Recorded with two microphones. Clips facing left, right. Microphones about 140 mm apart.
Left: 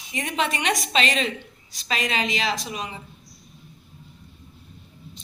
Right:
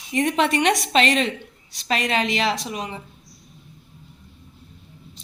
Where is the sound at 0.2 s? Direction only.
60° right (ahead or behind).